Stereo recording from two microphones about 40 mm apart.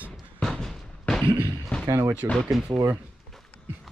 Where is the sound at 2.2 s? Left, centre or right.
Right.